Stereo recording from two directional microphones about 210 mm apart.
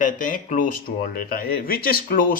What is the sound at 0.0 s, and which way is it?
Speech, 40° left (ahead or behind).